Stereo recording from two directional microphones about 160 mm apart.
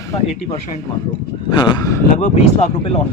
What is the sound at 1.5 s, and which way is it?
Speech, 25° left (ahead or behind).